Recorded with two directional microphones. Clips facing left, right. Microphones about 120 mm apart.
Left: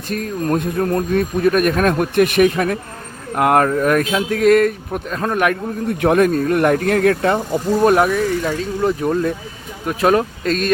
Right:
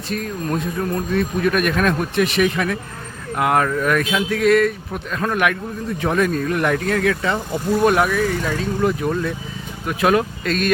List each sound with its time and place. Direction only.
0.1 s speech: 45° left (ahead or behind)
4.9 s speech: 30° left (ahead or behind)
6.0 s speech: 55° left (ahead or behind)
8.0 s speech: 30° left (ahead or behind)